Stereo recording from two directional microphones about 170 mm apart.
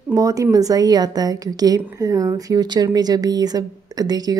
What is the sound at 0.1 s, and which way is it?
A woman's voice, 20° right (ahead or behind).